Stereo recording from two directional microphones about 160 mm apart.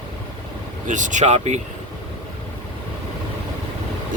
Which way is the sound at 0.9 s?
50° right (ahead or behind).